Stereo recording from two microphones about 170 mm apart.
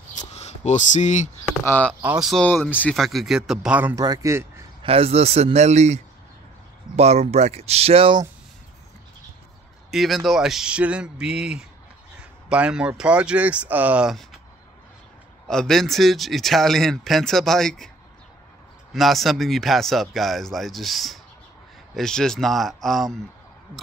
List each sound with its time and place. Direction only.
0.1 s a sound: 40° left (ahead or behind)
1.6 s speech: 10° left (ahead or behind)
2.0 s speech: 5° right (ahead or behind)
3.9 s speech: 20° right (ahead or behind)
4.8 s speech: 35° right (ahead or behind)
7.0 s speech: 40° right (ahead or behind)
9.8 s speech: centre (ahead or behind)
15.4 s speech: 5° left (ahead or behind)
18.9 s speech: centre (ahead or behind)